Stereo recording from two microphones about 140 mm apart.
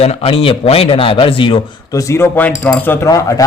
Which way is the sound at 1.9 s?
20° left (ahead or behind).